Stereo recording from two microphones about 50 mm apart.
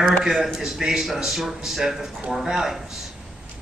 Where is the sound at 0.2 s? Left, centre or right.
Centre.